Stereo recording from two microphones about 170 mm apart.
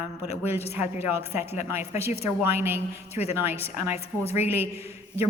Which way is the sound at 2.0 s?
35° left (ahead or behind).